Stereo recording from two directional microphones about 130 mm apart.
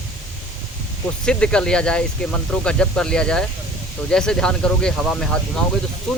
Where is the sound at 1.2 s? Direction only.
5° left (ahead or behind).